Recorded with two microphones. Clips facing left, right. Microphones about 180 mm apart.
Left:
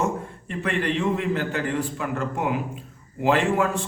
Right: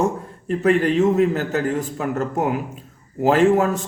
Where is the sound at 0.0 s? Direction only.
40° right (ahead or behind).